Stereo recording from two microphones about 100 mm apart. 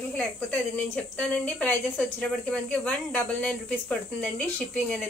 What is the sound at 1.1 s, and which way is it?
A woman's voice, 15° left (ahead or behind).